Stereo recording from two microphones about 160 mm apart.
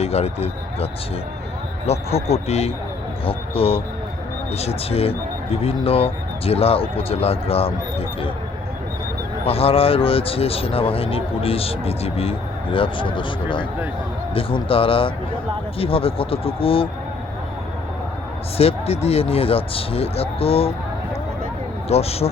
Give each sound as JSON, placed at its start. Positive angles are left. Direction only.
{"t": 0.0, "sound": "speech", "side_deg": 40}
{"t": 9.4, "sound": "speech", "side_deg": 35}
{"t": 18.5, "sound": "speech", "side_deg": 40}
{"t": 21.8, "sound": "speech", "side_deg": 40}